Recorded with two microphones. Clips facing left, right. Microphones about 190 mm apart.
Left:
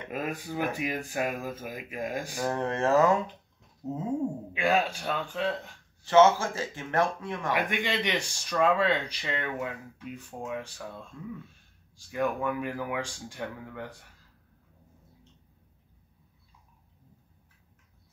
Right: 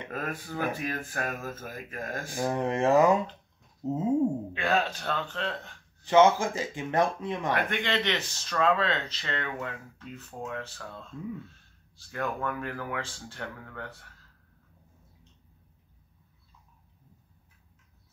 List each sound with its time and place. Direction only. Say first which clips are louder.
0.1 s speech: left 3 dB; 15° left (ahead or behind)
2.3 s speech: right 4 dB; 15° right (ahead or behind)
3.8 s a sound: right 4 dB; 20° right (ahead or behind)
4.6 s speech: left 5 dB; 10° left (ahead or behind)
6.0 s speech: even; 15° right (ahead or behind)
7.5 s speech: left 2 dB; 10° left (ahead or behind)